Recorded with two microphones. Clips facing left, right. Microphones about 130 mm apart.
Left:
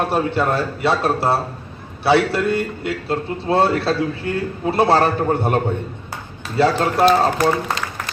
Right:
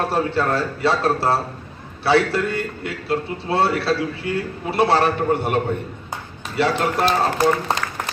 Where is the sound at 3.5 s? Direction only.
30° left (ahead or behind).